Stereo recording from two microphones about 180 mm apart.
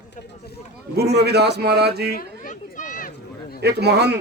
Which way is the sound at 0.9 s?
65° right (ahead or behind).